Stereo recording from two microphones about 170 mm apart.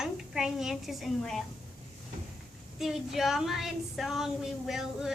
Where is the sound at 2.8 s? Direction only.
Centre (ahead or behind).